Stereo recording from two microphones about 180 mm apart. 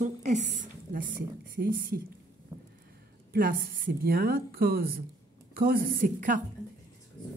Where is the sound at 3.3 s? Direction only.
50° right (ahead or behind).